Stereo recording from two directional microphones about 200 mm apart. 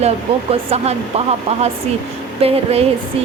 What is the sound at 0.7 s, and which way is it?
Speech, 30° right (ahead or behind).